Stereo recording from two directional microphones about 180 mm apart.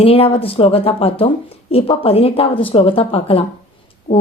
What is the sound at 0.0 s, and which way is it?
Speech, 30° left (ahead or behind).